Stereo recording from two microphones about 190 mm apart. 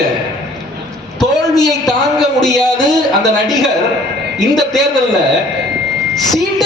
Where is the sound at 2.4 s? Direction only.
Centre (ahead or behind).